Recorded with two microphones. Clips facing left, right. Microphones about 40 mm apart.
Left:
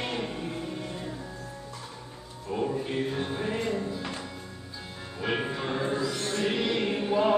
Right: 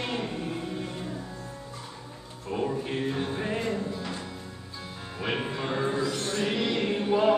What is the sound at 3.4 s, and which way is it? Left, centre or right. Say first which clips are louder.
Music: left 1 dB; centre.